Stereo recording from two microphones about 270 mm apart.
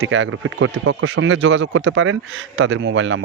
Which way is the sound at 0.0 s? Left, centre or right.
Right.